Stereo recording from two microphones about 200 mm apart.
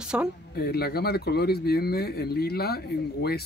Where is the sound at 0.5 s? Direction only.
50° left (ahead or behind).